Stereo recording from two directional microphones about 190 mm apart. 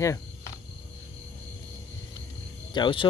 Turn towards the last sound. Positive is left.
turn(degrees=25)  # may be behind; listen again after turning